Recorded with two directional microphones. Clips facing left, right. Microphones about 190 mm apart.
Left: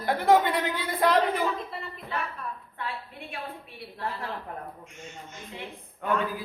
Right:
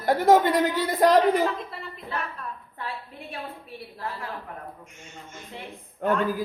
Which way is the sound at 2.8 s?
35° right (ahead or behind).